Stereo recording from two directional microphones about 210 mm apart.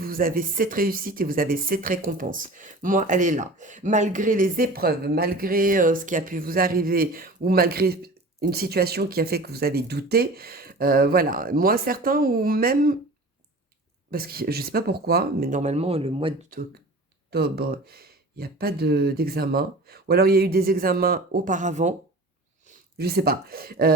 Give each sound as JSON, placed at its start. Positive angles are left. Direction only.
{"t": 0.0, "sound": "speech", "side_deg": -45}
{"t": 14.1, "sound": "speech", "side_deg": -45}
{"t": 17.3, "sound": "speech", "side_deg": -50}
{"t": 23.0, "sound": "speech", "side_deg": -45}